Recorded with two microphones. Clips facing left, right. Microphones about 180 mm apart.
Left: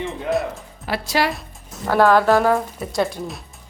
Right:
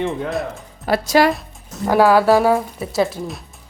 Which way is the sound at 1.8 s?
15° right (ahead or behind).